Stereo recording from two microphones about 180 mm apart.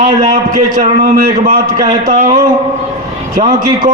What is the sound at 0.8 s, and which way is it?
Speech, 55° right (ahead or behind).